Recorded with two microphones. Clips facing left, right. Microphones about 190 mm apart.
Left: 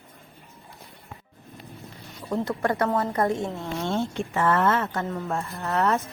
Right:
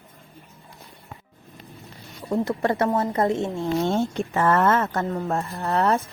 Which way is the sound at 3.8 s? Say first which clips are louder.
Right 3 dB; 45° right (ahead or behind).